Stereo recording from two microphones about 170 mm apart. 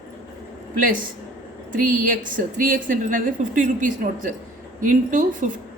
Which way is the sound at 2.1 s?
50° right (ahead or behind).